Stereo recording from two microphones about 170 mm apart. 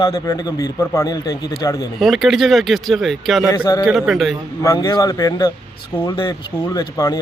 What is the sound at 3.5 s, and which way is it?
Speech, 20° left (ahead or behind).